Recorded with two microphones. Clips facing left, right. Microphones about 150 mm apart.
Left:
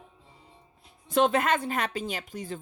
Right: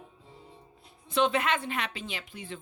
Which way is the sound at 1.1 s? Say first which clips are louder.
Left 3 dB; 45° left (ahead or behind).